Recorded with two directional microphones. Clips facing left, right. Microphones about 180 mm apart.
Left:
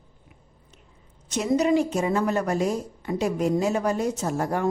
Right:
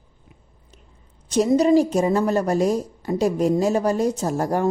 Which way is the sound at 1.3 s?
35° right (ahead or behind).